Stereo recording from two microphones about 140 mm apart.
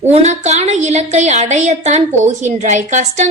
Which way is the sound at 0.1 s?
55° right (ahead or behind).